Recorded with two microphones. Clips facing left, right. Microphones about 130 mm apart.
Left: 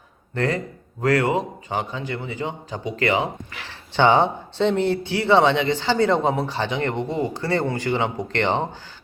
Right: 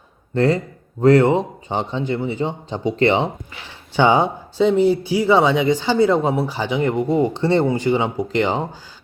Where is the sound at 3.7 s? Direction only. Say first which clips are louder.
Right 2 dB; 10° right (ahead or behind).